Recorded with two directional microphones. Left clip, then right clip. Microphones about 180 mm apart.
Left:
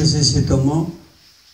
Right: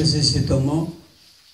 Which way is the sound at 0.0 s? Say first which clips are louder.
Left 2 dB; 20° right (ahead or behind).